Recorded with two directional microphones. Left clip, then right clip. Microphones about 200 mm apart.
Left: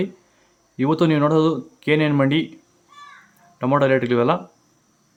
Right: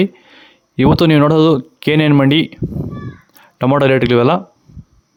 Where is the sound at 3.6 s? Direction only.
45° right (ahead or behind).